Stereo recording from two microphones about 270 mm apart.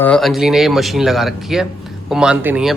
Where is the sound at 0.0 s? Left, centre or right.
Centre.